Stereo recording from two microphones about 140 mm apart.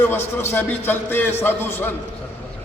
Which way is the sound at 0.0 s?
15° left (ahead or behind).